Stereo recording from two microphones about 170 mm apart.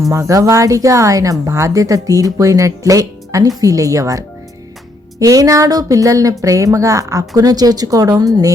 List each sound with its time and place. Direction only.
0.1 s speech: 20° right (ahead or behind)
5.2 s speech: 20° right (ahead or behind)